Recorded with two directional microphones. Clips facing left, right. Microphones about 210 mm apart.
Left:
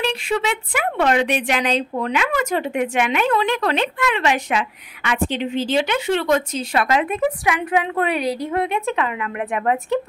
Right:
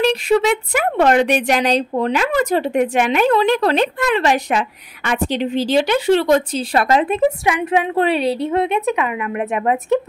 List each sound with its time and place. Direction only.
0.0 s speech: 40° right (ahead or behind); by 9.9 s 20° right (ahead or behind)